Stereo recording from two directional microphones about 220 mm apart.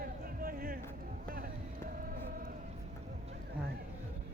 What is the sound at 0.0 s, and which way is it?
Music, 40° right (ahead or behind).